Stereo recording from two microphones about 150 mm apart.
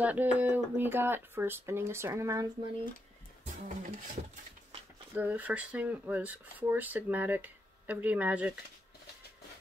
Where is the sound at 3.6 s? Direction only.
60° right (ahead or behind).